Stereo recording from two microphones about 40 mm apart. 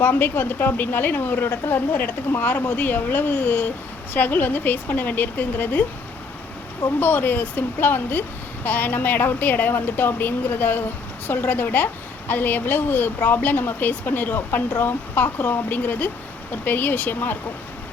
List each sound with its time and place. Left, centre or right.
0.0 s a woman's voice: left
7.0 s a woman's voice: left